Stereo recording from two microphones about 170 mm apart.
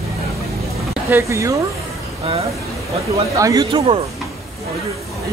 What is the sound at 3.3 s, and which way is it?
Speech, 20° right (ahead or behind).